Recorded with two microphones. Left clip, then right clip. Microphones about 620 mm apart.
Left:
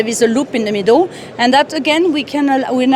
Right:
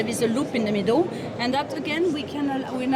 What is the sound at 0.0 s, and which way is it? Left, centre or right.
A woman's voice, left.